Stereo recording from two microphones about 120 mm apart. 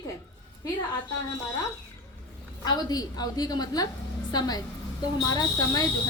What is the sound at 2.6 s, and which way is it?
A woman's voice, 35° left (ahead or behind).